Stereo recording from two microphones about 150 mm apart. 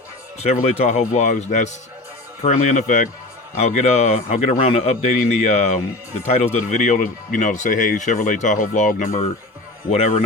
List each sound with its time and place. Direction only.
0.3 s a man's voice: 45° left (ahead or behind)